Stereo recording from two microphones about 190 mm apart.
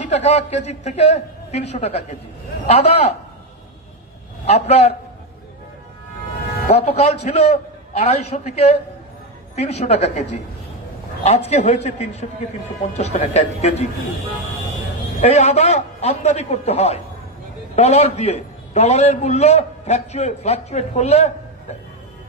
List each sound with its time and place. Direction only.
0.0 s a man's voice: 35° left (ahead or behind)
4.5 s a man's voice: 35° left (ahead or behind)
6.7 s a man's voice: 35° left (ahead or behind)
11.2 s a man's voice: 35° left (ahead or behind)
15.1 s a man's voice: 35° left (ahead or behind)